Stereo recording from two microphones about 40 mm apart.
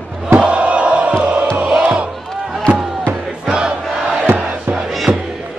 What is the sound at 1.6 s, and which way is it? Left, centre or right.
Crowd, right.